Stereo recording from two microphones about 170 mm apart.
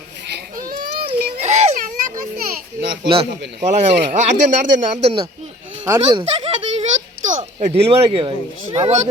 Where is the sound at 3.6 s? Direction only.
40° right (ahead or behind).